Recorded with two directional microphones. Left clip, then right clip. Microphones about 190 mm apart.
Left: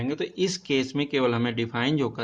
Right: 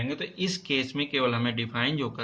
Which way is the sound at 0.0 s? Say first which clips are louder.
Left 4 dB; 60° left (ahead or behind).